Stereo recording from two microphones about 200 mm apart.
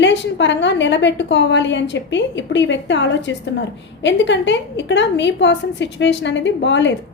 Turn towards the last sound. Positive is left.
turn(degrees=65)  # may be behind; listen again after turning